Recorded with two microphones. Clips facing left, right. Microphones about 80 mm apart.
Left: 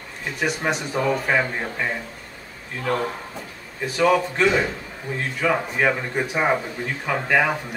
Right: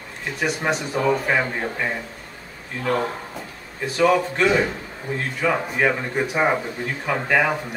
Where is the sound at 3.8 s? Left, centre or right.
Centre.